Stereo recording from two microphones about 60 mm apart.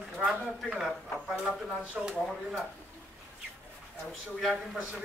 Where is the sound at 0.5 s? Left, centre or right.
Centre.